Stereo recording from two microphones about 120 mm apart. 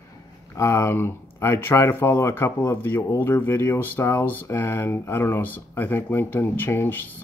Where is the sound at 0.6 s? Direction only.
20° left (ahead or behind).